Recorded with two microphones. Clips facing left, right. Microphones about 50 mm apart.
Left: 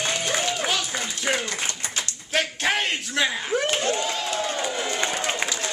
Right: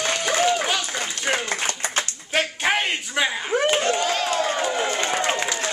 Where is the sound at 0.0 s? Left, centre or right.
Right.